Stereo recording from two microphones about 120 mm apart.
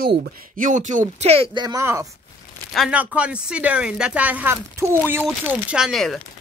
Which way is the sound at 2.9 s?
10° right (ahead or behind).